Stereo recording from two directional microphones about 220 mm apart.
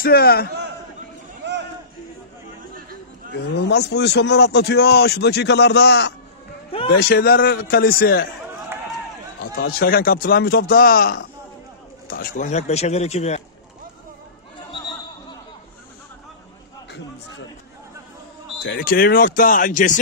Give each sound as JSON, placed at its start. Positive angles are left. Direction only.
{"t": 0.0, "sound": "a man's voice", "side_deg": 45}
{"t": 3.3, "sound": "a man's voice", "side_deg": 50}
{"t": 9.4, "sound": "a man's voice", "side_deg": 45}
{"t": 18.6, "sound": "speech", "side_deg": 45}